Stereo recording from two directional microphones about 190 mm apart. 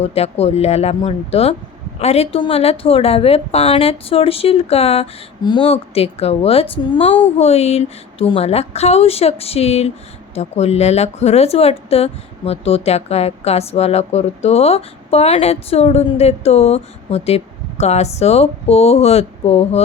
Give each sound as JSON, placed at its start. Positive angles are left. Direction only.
{"t": 0.0, "sound": "speech", "side_deg": 35}